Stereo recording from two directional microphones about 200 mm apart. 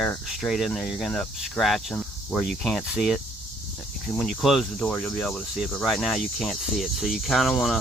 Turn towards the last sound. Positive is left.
turn(degrees=0)  # may be behind; listen again after turning